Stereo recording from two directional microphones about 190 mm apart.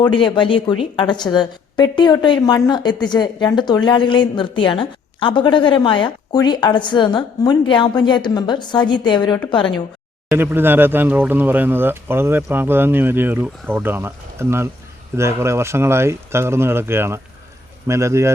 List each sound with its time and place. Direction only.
0.0 s a woman's voice: 25° left (ahead or behind)
10.3 s speech: 10° right (ahead or behind)